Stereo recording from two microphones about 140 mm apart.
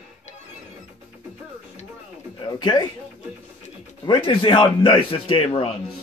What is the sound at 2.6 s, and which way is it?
Speech, 35° left (ahead or behind).